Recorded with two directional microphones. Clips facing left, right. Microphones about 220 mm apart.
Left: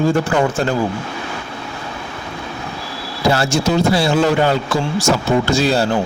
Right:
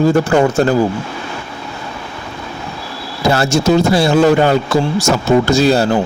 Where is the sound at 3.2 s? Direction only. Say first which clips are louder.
Right 3 dB; 45° right (ahead or behind).